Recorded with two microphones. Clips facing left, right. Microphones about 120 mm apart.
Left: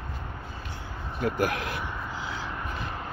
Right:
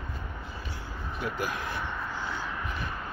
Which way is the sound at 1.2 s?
65° left (ahead or behind).